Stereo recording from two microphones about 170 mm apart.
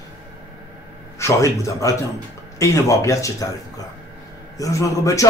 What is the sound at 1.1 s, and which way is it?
A man's voice, 15° left (ahead or behind).